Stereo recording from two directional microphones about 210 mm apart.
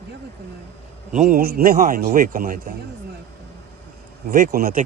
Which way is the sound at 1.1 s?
40° right (ahead or behind).